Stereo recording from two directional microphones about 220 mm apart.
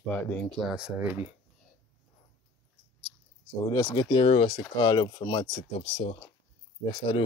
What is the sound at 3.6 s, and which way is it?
Speech, 15° left (ahead or behind).